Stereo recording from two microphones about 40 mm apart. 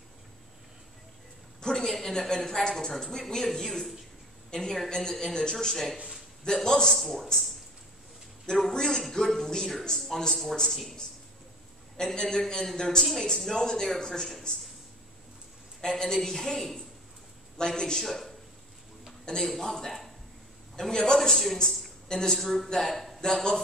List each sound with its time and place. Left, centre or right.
1.6 s a woman's voice: centre
8.5 s a woman's voice: centre
12.0 s a woman's voice: centre
13.0 s a man's voice: centre
15.8 s a woman's voice: centre
18.0 s a man's voice: centre